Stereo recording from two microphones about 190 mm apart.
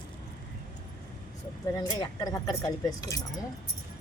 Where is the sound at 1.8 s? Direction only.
20° left (ahead or behind).